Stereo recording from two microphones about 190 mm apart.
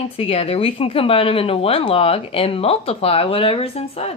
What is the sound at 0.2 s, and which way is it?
Speech, 30° left (ahead or behind).